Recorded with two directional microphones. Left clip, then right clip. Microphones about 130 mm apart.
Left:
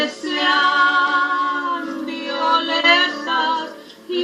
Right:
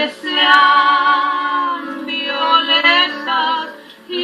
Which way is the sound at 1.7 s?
20° left (ahead or behind).